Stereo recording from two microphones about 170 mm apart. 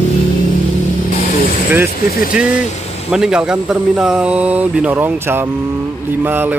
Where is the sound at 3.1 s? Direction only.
5° right (ahead or behind).